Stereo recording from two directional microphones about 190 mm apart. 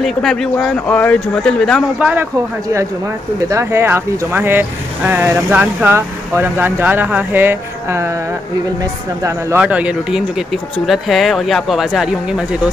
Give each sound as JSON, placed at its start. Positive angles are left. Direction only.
{"t": 0.0, "sound": "speech", "side_deg": 0}
{"t": 3.4, "sound": "speech", "side_deg": -15}
{"t": 9.2, "sound": "speech", "side_deg": -15}